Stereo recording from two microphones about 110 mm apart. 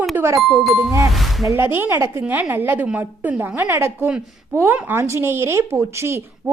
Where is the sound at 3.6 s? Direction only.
25° right (ahead or behind).